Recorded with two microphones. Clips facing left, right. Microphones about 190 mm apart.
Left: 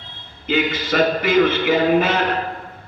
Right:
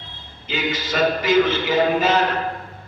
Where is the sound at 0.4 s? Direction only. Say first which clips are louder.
Left 5 dB; 55° left (ahead or behind).